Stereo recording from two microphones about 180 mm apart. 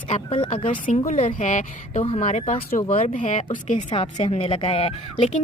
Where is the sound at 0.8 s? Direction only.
45° left (ahead or behind).